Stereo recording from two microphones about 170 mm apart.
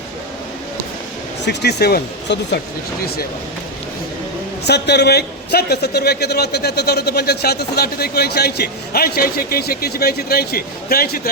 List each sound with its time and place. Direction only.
1.5 s a man's voice: 70° left (ahead or behind)
4.6 s a man's voice: 75° left (ahead or behind)